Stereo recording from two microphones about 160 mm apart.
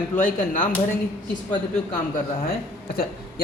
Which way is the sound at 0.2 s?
55° left (ahead or behind).